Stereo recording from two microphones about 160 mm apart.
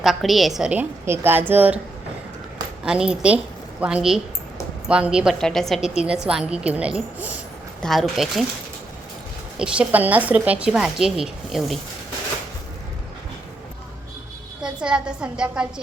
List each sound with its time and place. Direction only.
0.0 s a woman's voice: centre (ahead or behind)
2.8 s a woman's voice: 5° right (ahead or behind)
9.6 s a woman's voice: 10° right (ahead or behind)
14.6 s a woman's voice: 5° right (ahead or behind)